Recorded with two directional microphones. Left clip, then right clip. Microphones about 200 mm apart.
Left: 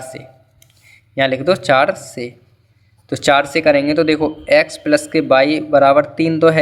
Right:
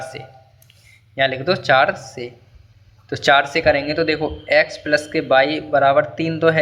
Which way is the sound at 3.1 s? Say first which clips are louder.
Left 1 dB; 30° left (ahead or behind).